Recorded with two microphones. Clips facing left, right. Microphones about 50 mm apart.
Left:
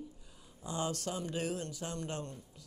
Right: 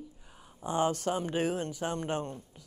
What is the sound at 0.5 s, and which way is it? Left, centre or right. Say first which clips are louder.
Speech: right 8 dB; right.